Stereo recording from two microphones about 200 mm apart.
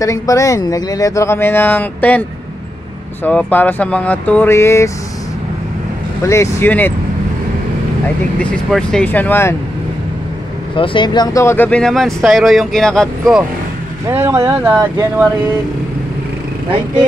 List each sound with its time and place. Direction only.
0.0 s speech: 15° left (ahead or behind)
3.3 s speech: 10° left (ahead or behind)
6.2 s speech: 15° left (ahead or behind)
8.4 s speech: 5° left (ahead or behind)
10.8 s speech: 25° left (ahead or behind); by 13.4 s 5° left (ahead or behind)
14.0 s speech: 10° right (ahead or behind)